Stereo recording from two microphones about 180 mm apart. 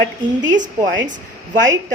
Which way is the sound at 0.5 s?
45° right (ahead or behind).